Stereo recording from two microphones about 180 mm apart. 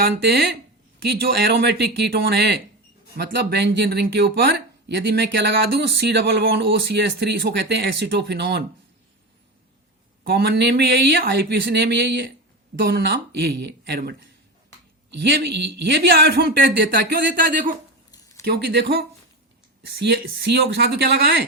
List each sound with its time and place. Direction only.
1.1 s speech: 70° right (ahead or behind)
10.2 s speech: 60° right (ahead or behind)
15.2 s speech: 65° right (ahead or behind); by 17.7 s 50° right (ahead or behind)
18.4 s speech: 60° right (ahead or behind)